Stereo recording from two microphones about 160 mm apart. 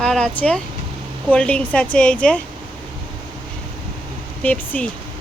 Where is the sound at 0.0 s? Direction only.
5° left (ahead or behind).